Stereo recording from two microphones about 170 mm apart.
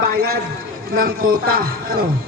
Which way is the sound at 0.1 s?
60° right (ahead or behind).